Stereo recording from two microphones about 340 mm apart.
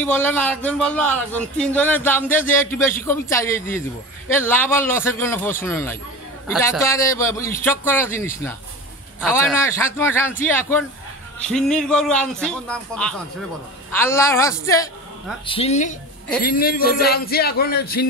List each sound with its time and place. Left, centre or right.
0.0 s a woman's voice: centre; by 18.0 s left